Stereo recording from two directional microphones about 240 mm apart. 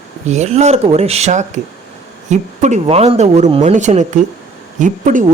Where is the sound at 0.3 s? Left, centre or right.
Right.